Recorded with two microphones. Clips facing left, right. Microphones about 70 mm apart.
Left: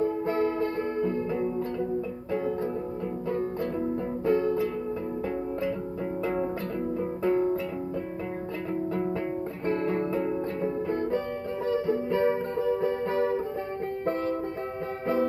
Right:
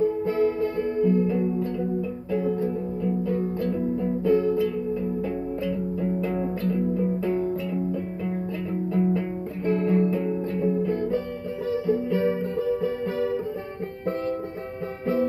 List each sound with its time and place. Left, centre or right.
0.3 s music: left
4.2 s music: left
9.8 s music: left